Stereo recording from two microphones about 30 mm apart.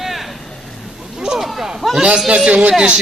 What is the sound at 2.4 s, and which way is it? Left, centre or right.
Speech, right.